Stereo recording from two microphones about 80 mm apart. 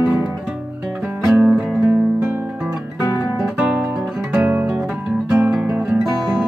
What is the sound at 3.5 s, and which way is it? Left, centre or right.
Guitar, centre.